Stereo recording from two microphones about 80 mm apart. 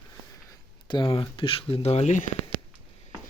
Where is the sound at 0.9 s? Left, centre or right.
Left.